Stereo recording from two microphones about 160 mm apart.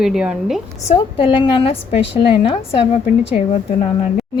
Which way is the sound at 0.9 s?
35° left (ahead or behind).